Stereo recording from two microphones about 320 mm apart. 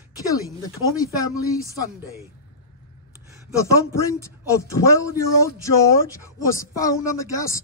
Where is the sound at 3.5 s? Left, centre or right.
Centre.